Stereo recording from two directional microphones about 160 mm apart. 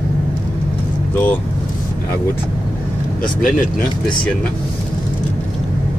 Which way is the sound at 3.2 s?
60° left (ahead or behind).